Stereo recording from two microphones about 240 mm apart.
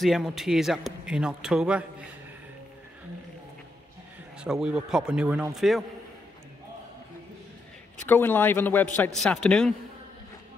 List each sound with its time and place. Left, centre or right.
0.0 s a man's voice: centre
4.4 s a man's voice: centre
8.1 s a man's voice: centre